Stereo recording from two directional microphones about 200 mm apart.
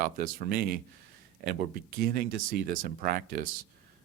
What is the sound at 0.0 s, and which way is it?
Speech, 45° right (ahead or behind).